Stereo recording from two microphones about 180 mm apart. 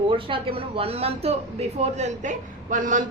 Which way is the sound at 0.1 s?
30° right (ahead or behind).